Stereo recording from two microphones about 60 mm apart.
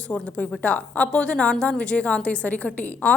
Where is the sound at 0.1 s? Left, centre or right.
Left.